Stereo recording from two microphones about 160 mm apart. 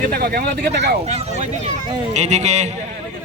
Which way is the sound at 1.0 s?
40° right (ahead or behind).